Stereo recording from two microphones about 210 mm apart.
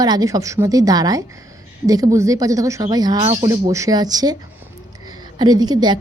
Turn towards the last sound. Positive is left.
turn(degrees=-20)  # may be behind; listen again after turning